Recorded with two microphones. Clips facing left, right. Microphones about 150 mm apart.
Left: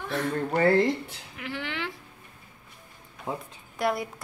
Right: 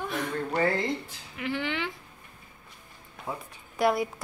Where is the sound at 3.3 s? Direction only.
15° left (ahead or behind).